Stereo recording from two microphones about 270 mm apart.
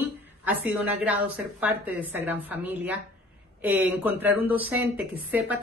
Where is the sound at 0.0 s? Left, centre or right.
Centre.